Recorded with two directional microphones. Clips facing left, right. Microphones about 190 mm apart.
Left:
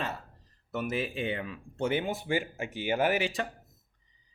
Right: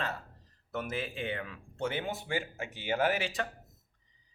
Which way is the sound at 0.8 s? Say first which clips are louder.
Left 4 dB; 15° left (ahead or behind).